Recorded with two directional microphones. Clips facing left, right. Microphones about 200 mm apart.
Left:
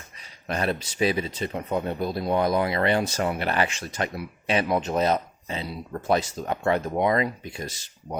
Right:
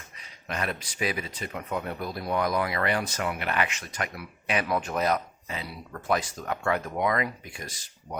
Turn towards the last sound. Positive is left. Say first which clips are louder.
# left 4 dB
turn(degrees=25)  # may be behind; listen again after turning